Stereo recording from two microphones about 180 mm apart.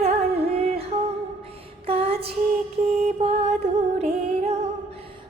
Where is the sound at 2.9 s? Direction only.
35° right (ahead or behind).